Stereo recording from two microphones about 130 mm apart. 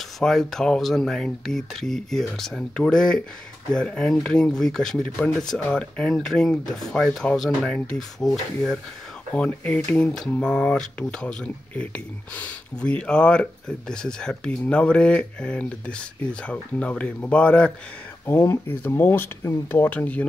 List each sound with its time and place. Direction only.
0.2 s speech: 5° left (ahead or behind)
18.2 s speech: 20° left (ahead or behind)